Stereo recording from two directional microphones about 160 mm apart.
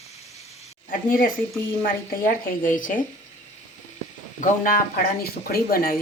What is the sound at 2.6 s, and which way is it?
Speech, 55° left (ahead or behind).